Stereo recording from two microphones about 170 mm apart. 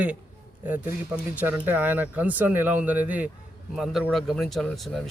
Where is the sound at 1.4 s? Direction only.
10° right (ahead or behind).